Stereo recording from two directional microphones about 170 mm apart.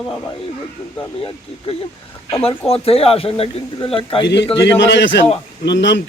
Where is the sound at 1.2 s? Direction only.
30° left (ahead or behind).